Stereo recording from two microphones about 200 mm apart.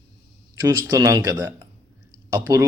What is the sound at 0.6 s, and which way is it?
A man's voice, 15° right (ahead or behind).